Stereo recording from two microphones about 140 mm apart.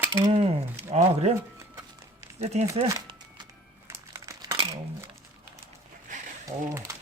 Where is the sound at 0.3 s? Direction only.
50° right (ahead or behind).